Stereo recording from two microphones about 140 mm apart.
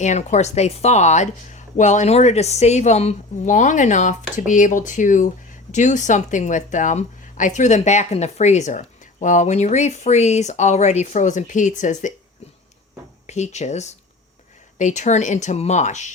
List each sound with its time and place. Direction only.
0.0 s speech: 55° left (ahead or behind)
13.2 s speech: 55° left (ahead or behind)